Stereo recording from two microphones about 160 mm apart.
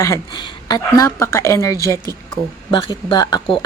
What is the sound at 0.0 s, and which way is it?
Speech, 25° left (ahead or behind).